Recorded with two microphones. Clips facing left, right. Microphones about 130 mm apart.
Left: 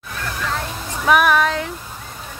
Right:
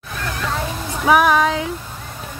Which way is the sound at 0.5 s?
10° right (ahead or behind).